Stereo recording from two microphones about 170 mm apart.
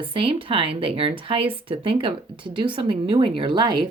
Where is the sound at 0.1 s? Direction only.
30° right (ahead or behind).